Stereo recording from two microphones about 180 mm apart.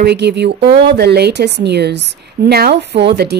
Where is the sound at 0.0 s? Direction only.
65° right (ahead or behind).